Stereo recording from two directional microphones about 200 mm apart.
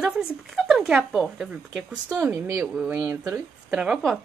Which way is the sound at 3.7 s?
5° right (ahead or behind).